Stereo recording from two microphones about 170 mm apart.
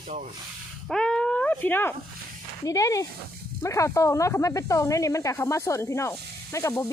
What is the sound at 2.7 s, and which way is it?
Speech, 20° left (ahead or behind).